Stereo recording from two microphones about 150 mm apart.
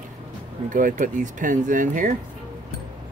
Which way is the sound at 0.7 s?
60° right (ahead or behind).